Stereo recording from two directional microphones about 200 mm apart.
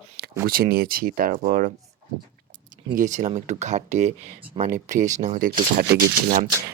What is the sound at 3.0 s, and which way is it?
Speech, 40° right (ahead or behind).